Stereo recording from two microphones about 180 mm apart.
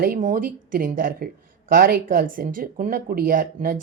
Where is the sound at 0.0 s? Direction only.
50° right (ahead or behind).